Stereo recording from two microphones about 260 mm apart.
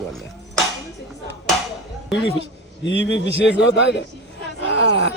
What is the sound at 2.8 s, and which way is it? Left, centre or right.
A man's voice, left.